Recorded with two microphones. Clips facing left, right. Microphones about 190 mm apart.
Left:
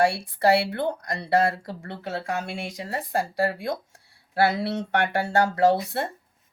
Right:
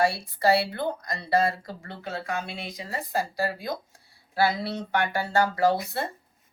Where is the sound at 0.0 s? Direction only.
75° left (ahead or behind).